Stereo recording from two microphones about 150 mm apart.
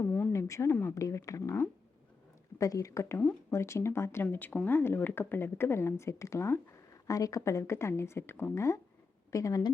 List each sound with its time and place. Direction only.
0.0 s a woman's voice: 10° left (ahead or behind)